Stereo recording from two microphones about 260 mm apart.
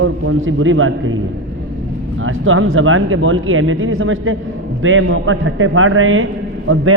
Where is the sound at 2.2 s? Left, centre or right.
Right.